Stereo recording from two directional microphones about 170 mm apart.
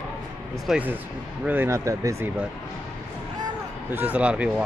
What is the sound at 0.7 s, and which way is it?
Speech, 10° right (ahead or behind).